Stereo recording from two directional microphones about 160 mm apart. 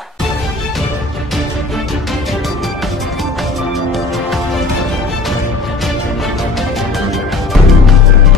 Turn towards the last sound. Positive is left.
turn(degrees=0)  # may be behind; listen again after turning